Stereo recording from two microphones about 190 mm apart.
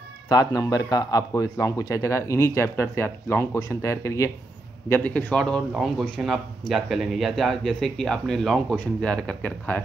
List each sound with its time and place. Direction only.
0.3 s a man's voice: 20° left (ahead or behind)